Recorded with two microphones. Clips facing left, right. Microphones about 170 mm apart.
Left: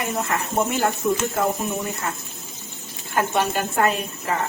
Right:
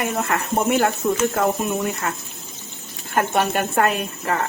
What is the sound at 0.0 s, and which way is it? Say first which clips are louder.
A woman's voice: right 2 dB; 65° right (ahead or behind).